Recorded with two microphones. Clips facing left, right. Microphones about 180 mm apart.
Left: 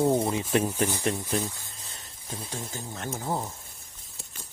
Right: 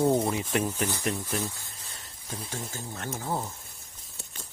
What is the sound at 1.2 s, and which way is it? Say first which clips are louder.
Speech: left 2 dB; 20° left (ahead or behind).